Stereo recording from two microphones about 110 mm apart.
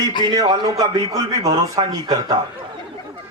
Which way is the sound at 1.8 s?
50° right (ahead or behind).